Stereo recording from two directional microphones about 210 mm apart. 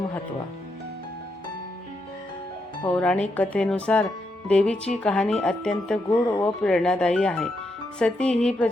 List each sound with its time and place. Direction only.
2.8 s speech: 5° left (ahead or behind)
6.1 s speech: 15° left (ahead or behind)
6.6 s speech: 5° left (ahead or behind)